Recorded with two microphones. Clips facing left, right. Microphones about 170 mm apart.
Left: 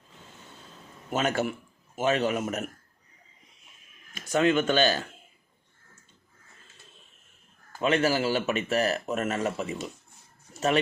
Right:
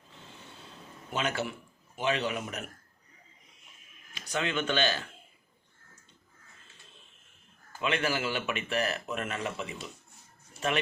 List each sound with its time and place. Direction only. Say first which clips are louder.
1.1 s a man's voice: left 5 dB; 45° left (ahead or behind)
4.1 s speech: left 9 dB; 45° left (ahead or behind)
7.8 s speech: left 6 dB; 40° left (ahead or behind)
10.5 s a sound: left 6 dB; 40° left (ahead or behind)